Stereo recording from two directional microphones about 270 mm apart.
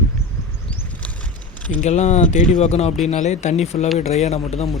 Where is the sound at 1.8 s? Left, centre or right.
Left.